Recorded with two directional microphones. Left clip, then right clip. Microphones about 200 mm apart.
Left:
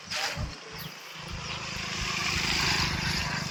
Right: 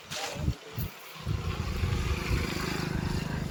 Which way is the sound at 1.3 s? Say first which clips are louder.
Left 3 dB; 50° right (ahead or behind).